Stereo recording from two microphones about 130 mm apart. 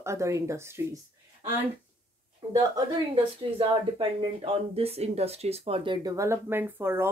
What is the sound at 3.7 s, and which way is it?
Speech, 45° right (ahead or behind).